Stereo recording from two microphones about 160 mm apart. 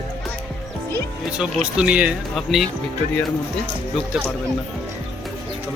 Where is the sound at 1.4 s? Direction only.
5° right (ahead or behind).